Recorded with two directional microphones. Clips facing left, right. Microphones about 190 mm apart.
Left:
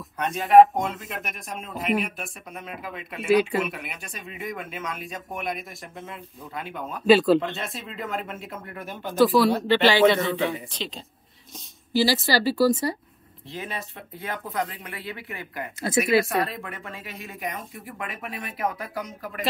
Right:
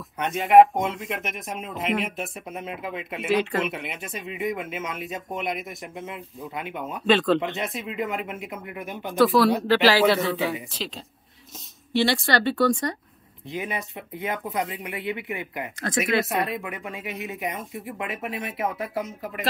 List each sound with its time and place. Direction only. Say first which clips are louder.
0.2 s speech: even; 20° right (ahead or behind)
7.1 s speech: left 3 dB; 5° left (ahead or behind)
7.3 s speech: left 1 dB; 20° right (ahead or behind)
9.1 s speech: even; centre (ahead or behind)
13.5 s speech: right 4 dB; 15° right (ahead or behind)